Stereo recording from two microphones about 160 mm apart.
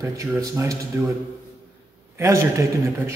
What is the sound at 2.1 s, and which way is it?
A man's voice, 20° right (ahead or behind).